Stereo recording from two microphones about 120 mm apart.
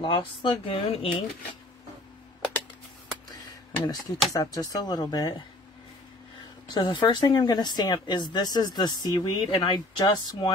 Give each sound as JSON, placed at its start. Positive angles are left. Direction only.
{"t": 0.0, "sound": "speech", "side_deg": 45}
{"t": 3.8, "sound": "speech", "side_deg": 30}
{"t": 6.7, "sound": "speech", "side_deg": 40}